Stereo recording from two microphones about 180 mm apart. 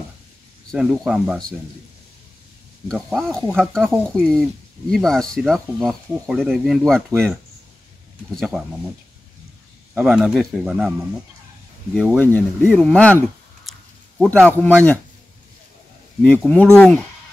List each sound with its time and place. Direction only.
0.7 s speech: centre (ahead or behind)
2.9 s speech: centre (ahead or behind)
7.1 s speech: 20° right (ahead or behind)
8.4 s speech: centre (ahead or behind)
9.9 s speech: 5° right (ahead or behind)
11.9 s speech: 5° left (ahead or behind)
13.7 s a sound: centre (ahead or behind)
16.3 s speech: 10° left (ahead or behind)